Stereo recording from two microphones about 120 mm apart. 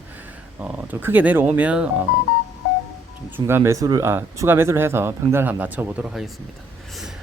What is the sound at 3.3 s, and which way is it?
Speech, 20° right (ahead or behind).